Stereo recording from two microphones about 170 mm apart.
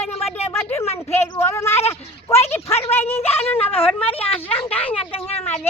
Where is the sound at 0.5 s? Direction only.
15° left (ahead or behind).